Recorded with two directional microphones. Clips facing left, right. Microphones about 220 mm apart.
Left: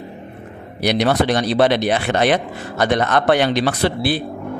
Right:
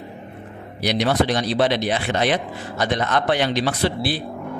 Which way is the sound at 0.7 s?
60° left (ahead or behind).